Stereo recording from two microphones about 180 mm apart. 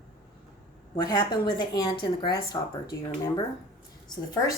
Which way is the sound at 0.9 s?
25° left (ahead or behind).